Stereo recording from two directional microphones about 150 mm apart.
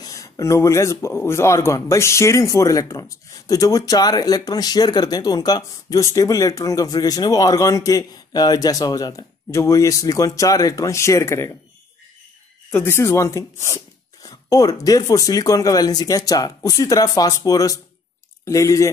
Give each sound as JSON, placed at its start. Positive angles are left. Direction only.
{"t": 0.0, "sound": "speech", "side_deg": 20}
{"t": 12.7, "sound": "speech", "side_deg": 15}